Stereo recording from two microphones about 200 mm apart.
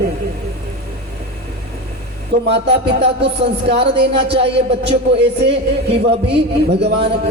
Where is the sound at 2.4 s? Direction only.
60° right (ahead or behind).